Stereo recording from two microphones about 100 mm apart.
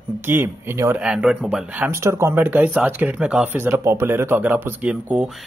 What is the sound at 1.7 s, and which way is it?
A man's voice, 25° right (ahead or behind).